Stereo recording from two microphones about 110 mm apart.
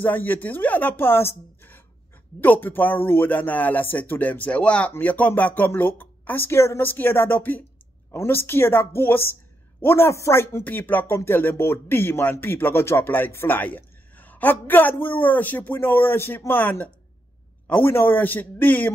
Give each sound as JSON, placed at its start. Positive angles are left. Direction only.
{"t": 0.0, "sound": "a woman's voice", "side_deg": 15}